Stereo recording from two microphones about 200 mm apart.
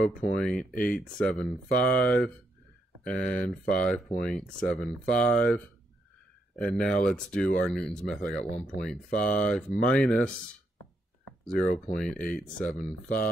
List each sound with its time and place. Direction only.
0.0 s speech: 45° left (ahead or behind)
0.4 s speech: centre (ahead or behind)
9.1 s speech: 45° left (ahead or behind)
9.5 s speech: centre (ahead or behind)
11.5 s speech: 5° left (ahead or behind)